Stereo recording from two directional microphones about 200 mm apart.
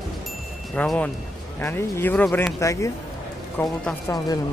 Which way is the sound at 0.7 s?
5° left (ahead or behind).